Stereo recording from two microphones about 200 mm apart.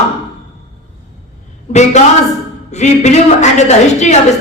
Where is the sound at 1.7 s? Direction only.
35° left (ahead or behind).